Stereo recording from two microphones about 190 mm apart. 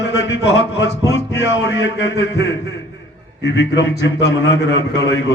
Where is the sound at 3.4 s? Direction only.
65° left (ahead or behind).